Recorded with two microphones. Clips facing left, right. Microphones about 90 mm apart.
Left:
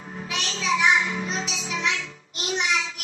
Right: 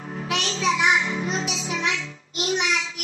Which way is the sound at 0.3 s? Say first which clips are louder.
Right 2 dB; 60° right (ahead or behind).